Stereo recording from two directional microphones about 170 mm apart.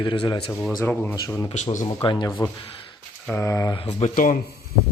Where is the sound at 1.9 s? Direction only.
25° left (ahead or behind).